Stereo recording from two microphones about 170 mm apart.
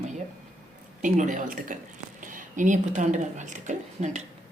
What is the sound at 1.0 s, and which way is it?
A woman's voice, 50° right (ahead or behind).